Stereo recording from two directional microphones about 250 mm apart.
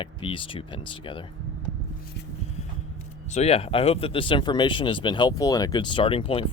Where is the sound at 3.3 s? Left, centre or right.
Left.